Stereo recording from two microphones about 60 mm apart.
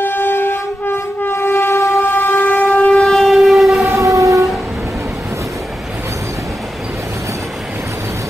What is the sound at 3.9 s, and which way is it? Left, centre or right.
Train, right.